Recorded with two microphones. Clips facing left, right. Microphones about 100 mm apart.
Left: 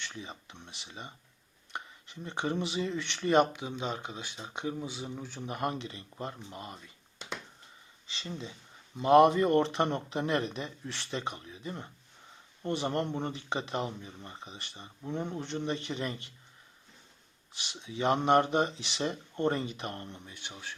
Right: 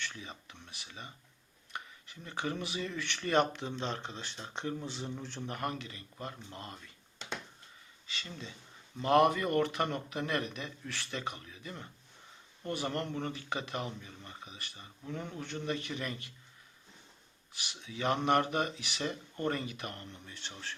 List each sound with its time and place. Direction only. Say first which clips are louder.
0.2 s speech: left 3 dB; 20° left (ahead or behind)
5.5 s speech: left 5 dB; 25° left (ahead or behind)
8.0 s speech: left 4 dB; 25° left (ahead or behind)
17.5 s speech: left 3 dB; 25° left (ahead or behind)